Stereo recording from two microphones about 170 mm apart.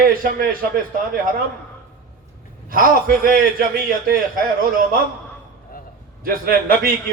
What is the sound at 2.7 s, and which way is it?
A man's voice, 55° right (ahead or behind).